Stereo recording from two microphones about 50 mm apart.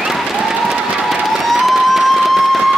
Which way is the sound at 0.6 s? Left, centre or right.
Centre.